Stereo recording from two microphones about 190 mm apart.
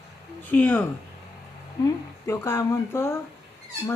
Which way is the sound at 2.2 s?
15° left (ahead or behind).